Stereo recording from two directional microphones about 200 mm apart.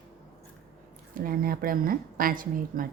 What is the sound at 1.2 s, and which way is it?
Speech, 45° right (ahead or behind).